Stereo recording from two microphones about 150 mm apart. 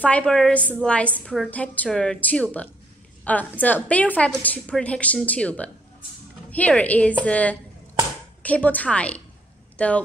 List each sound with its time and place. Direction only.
0.0 s a woman's voice: 10° left (ahead or behind)